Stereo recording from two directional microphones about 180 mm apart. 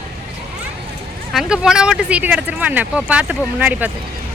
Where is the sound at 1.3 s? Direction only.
Centre (ahead or behind).